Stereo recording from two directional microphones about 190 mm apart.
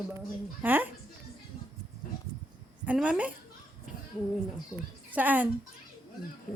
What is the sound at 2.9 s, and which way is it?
Speech, 5° right (ahead or behind).